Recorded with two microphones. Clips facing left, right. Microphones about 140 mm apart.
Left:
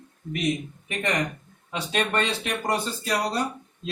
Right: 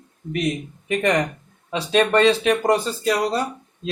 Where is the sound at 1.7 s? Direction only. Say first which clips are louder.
Right 8 dB; 90° right.